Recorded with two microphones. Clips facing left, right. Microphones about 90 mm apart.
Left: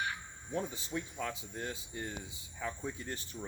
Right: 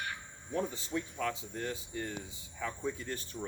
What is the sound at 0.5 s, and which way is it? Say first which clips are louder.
Speech: right 2 dB; 15° left (ahead or behind).